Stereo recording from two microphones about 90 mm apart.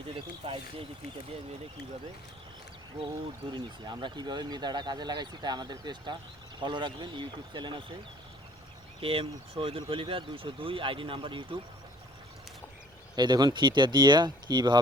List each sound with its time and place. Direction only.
0.4 s speech: 85° right
3.5 s speech: 55° right (ahead or behind)
9.0 s speech: 90° right
9.9 s speech: 75° right (ahead or behind)
13.1 s speech: 50° right (ahead or behind)